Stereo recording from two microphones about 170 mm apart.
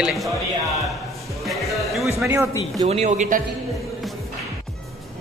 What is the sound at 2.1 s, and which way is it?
Speech, 15° right (ahead or behind).